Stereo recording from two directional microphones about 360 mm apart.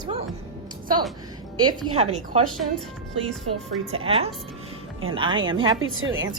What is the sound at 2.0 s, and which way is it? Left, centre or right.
Speech, centre.